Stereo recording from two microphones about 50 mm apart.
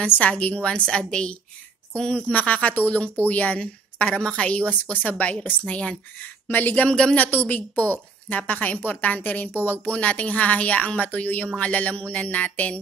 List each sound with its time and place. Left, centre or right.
0.0 s a woman's voice: left; by 2.3 s centre
2.3 s a woman's voice: left
6.9 s speech: centre
7.2 s a woman's voice: left